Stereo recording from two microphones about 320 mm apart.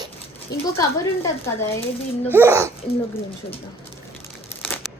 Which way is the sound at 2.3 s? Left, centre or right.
Centre.